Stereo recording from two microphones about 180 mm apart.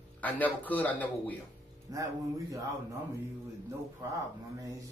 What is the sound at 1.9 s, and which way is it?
Speech, 20° right (ahead or behind).